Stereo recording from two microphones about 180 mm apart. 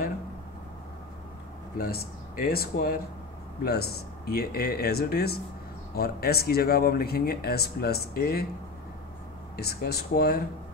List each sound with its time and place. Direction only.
1.8 s speech: 55° left (ahead or behind)
9.6 s speech: 60° left (ahead or behind)